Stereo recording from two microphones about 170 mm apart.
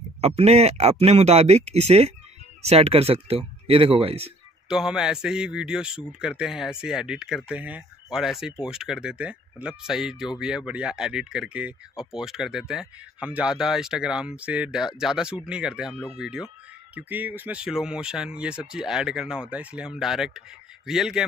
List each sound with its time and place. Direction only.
0.2 s speech: 40° right (ahead or behind)
4.6 s a man's voice: 5° right (ahead or behind)